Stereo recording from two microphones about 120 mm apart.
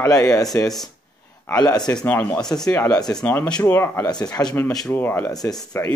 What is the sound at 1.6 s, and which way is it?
Speech, 35° left (ahead or behind).